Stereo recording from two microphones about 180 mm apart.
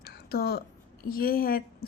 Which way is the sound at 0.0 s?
60° left (ahead or behind).